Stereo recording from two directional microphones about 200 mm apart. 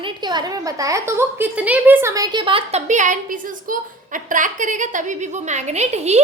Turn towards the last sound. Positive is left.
turn(degrees=-35)  # may be behind; listen again after turning